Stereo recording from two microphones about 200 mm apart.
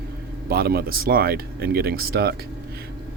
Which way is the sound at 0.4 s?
50° right (ahead or behind).